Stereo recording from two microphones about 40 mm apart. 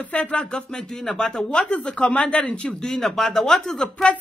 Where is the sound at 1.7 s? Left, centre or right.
Left.